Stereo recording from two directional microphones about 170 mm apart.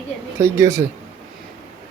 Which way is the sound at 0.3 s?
15° right (ahead or behind).